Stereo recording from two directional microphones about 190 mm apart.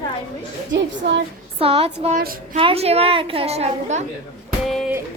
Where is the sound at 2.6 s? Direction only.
30° right (ahead or behind).